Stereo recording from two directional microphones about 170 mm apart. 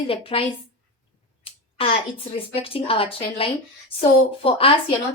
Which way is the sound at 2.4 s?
35° left (ahead or behind).